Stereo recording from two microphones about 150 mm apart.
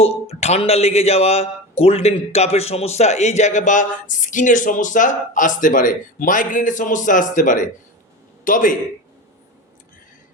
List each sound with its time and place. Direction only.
0.0 s a man's voice: 45° left (ahead or behind); by 8.7 s 60° left (ahead or behind)